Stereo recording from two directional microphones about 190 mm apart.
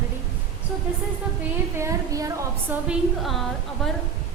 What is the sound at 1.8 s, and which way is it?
Speech, 15° right (ahead or behind).